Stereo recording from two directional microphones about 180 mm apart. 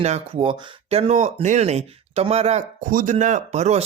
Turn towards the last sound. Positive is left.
turn(degrees=-40)  # may be behind; listen again after turning